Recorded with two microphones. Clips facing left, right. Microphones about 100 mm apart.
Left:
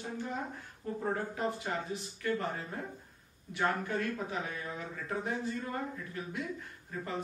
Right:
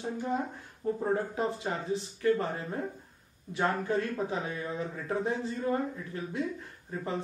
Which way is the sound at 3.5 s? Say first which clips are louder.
Right 3 dB; 25° right (ahead or behind).